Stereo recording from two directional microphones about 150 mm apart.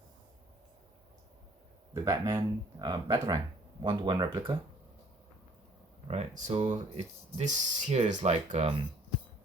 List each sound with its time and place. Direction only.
1.9 s speech: 20° right (ahead or behind)
6.1 s speech: 50° right (ahead or behind)